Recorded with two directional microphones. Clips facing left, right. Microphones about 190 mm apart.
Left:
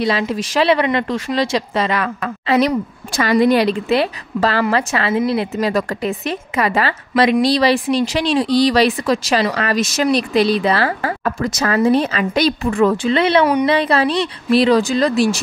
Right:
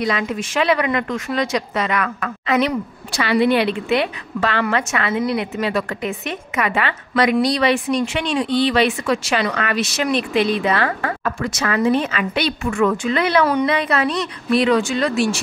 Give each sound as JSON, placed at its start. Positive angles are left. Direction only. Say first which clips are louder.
{"t": 0.0, "sound": "a woman's voice", "louder": "left 3 dB", "side_deg": 30}
{"t": 3.2, "sound": "a woman's voice", "louder": "left 3 dB", "side_deg": 40}